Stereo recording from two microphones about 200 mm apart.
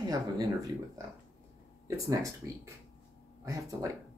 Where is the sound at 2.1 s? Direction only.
15° right (ahead or behind).